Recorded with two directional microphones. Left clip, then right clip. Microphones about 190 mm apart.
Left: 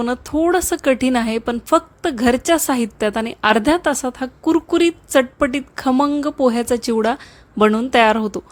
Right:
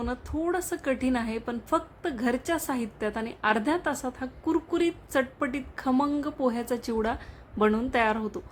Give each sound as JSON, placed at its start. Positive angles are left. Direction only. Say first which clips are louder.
{"t": 0.0, "sound": "a woman's voice", "louder": "left 12 dB", "side_deg": 45}